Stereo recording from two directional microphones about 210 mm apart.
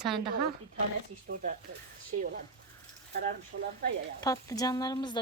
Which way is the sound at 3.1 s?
45° right (ahead or behind).